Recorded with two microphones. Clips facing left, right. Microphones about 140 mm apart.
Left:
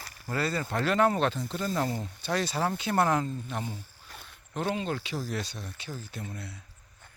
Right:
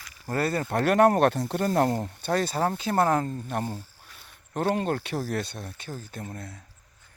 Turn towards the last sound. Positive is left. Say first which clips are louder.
# right 2 dB
turn(degrees=-45)  # may be behind; listen again after turning